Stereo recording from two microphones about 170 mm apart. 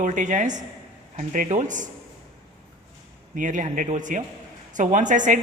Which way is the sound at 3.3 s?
50° right (ahead or behind).